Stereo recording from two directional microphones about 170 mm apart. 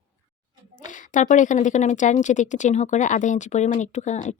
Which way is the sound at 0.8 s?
50° left (ahead or behind).